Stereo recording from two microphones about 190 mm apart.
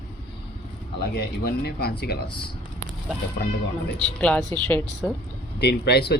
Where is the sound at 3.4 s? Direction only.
50° left (ahead or behind).